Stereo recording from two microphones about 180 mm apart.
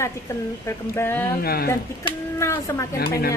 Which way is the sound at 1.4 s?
60° left (ahead or behind).